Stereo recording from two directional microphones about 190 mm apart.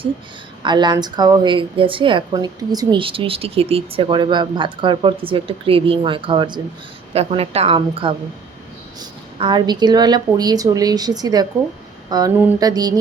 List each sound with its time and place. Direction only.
0.6 s a woman's voice: 25° right (ahead or behind)